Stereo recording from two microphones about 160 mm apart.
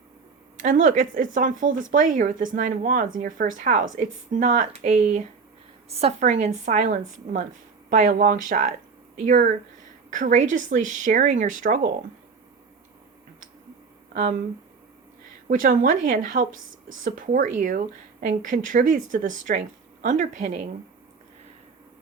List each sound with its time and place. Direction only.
0.6 s speech: 55° right (ahead or behind)
14.1 s speech: 60° right (ahead or behind)
15.4 s speech: 60° right (ahead or behind)